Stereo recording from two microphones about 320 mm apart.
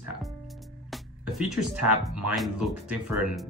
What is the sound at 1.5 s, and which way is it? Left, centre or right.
Speech, centre.